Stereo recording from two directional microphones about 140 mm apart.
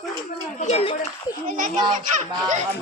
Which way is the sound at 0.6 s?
50° left (ahead or behind).